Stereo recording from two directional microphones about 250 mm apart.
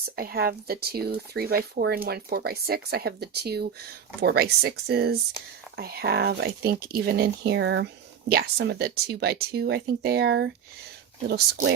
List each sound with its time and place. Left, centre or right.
0.2 s speech: right